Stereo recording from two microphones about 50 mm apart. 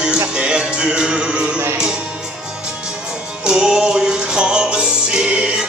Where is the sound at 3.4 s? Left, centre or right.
Centre.